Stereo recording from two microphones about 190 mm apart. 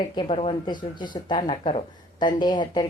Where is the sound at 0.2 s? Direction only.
30° left (ahead or behind).